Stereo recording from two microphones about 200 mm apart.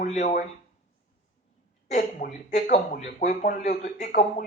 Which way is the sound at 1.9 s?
40° left (ahead or behind).